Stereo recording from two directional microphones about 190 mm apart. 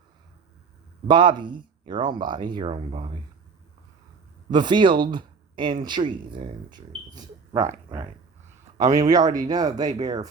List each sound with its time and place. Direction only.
1.0 s speech: 25° right (ahead or behind)
4.5 s speech: 25° right (ahead or behind)